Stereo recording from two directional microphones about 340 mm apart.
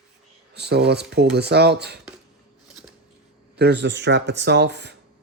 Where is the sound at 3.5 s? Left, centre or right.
Right.